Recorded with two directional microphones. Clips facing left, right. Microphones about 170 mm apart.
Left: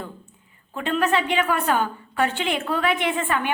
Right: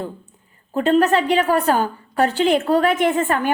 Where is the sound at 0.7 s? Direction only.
40° right (ahead or behind).